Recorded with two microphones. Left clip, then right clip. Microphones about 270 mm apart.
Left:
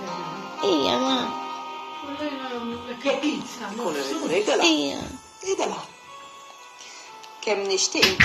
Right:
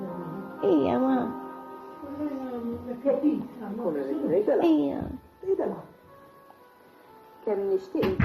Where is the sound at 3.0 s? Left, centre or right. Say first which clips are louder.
Even; left.